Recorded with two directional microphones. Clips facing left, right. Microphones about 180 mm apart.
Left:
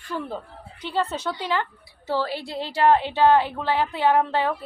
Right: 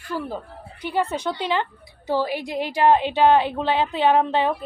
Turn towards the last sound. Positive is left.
turn(degrees=-20)  # may be behind; listen again after turning